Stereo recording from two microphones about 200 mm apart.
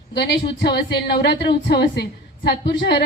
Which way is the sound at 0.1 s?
55° left (ahead or behind).